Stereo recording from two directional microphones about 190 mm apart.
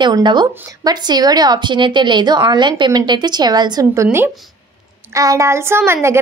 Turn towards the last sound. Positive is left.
turn(degrees=-15)  # may be behind; listen again after turning